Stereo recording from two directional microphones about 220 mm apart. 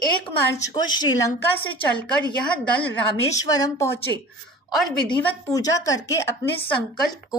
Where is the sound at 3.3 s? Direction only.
15° left (ahead or behind).